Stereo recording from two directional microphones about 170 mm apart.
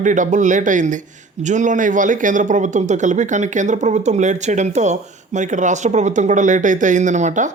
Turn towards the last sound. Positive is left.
turn(degrees=-45)  # may be behind; listen again after turning